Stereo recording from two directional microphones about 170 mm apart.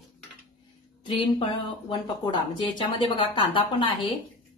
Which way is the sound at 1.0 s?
30° left (ahead or behind).